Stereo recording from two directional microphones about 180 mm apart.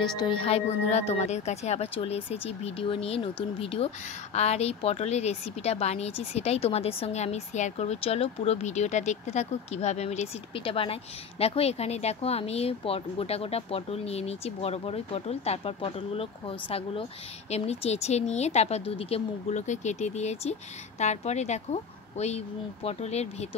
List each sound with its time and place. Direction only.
0.1 s speech: 25° left (ahead or behind)